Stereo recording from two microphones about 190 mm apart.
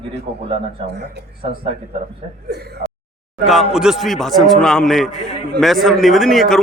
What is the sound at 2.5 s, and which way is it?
Speech, 60° right (ahead or behind).